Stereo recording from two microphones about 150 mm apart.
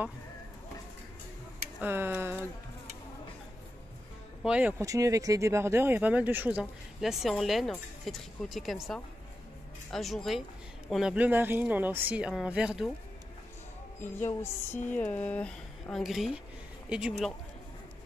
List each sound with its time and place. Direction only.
1.8 s speech: 15° right (ahead or behind)
4.5 s speech: 10° right (ahead or behind)
4.8 s speech: 20° right (ahead or behind); by 12.9 s 5° right (ahead or behind)
14.2 s speech: 15° left (ahead or behind); by 17.3 s 5° right (ahead or behind)